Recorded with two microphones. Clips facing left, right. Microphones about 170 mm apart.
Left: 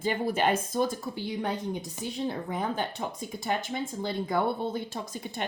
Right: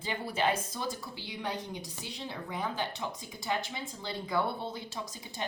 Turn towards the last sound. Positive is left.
turn(degrees=60)  # may be behind; listen again after turning